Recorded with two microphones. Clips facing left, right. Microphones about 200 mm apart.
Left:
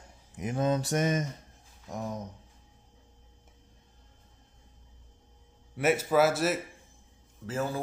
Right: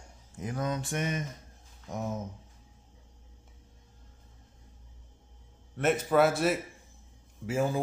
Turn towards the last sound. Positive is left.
turn(degrees=-15)  # may be behind; listen again after turning